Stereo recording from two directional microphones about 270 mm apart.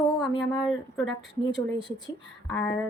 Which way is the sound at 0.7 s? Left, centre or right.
Centre.